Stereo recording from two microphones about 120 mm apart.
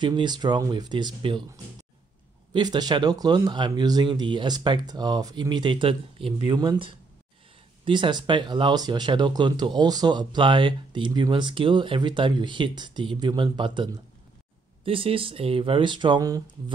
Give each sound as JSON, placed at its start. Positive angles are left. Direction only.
{"t": 0.0, "sound": "speech", "side_deg": -40}
{"t": 2.5, "sound": "speech", "side_deg": -35}
{"t": 14.9, "sound": "speech", "side_deg": -50}